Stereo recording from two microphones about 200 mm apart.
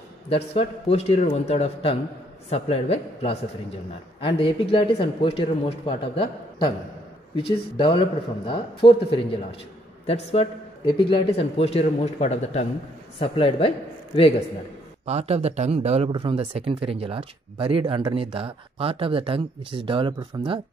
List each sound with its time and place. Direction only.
0.3 s a man's voice: 30° left (ahead or behind)
15.0 s speech: 30° right (ahead or behind)